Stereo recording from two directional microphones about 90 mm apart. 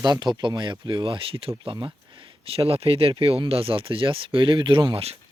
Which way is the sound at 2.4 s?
90° right.